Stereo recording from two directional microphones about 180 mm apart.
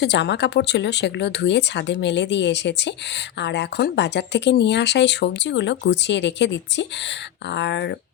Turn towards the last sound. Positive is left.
turn(degrees=75)  # may be behind; listen again after turning